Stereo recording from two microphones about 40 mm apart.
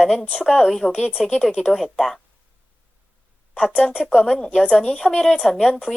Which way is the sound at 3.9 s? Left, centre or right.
Centre.